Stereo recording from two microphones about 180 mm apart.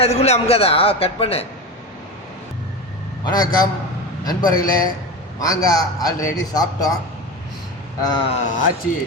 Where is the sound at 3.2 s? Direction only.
20° left (ahead or behind).